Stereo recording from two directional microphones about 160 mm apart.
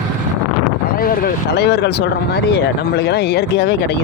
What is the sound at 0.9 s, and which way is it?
Speech, 65° left (ahead or behind).